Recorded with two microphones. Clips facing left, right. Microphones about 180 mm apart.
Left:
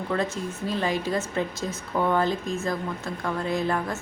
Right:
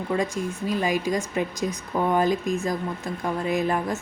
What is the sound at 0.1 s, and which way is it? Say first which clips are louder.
Speech: right 2 dB; 10° right (ahead or behind).